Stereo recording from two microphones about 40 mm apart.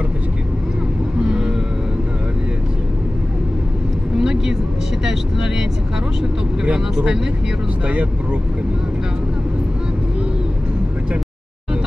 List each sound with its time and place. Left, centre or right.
1.2 s vehicle: centre
4.2 s vehicle: centre
5.0 s speech: centre
6.6 s speech: right